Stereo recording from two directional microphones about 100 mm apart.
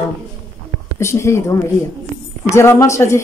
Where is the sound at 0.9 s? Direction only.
25° left (ahead or behind).